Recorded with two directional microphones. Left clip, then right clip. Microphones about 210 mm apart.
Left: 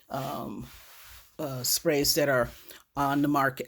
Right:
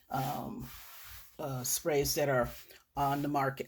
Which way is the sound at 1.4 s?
45° left (ahead or behind).